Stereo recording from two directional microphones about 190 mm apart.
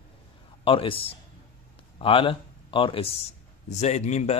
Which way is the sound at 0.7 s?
30° left (ahead or behind).